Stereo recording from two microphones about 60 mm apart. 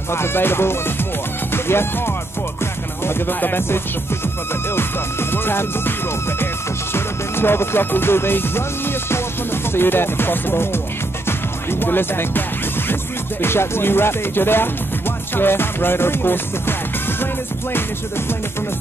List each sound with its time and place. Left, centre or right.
0.1 s music: left